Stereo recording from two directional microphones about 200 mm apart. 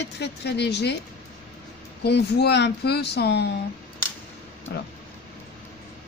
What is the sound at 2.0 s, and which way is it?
Speech, 55° left (ahead or behind).